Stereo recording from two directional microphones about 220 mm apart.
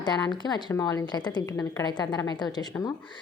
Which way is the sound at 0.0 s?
20° left (ahead or behind).